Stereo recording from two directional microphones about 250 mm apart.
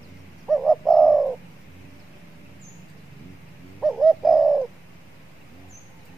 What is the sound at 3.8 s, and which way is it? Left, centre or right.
Bird, centre.